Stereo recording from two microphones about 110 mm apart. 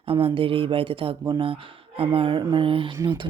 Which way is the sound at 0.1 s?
55° right (ahead or behind).